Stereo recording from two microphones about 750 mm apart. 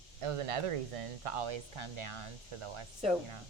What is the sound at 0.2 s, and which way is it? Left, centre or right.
Speech, right.